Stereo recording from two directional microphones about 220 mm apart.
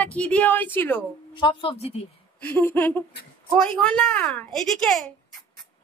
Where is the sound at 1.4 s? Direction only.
25° left (ahead or behind).